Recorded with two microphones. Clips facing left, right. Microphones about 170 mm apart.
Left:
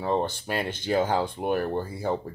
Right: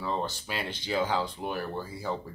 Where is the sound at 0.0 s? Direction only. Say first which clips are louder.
Left 6 dB; 55° left (ahead or behind).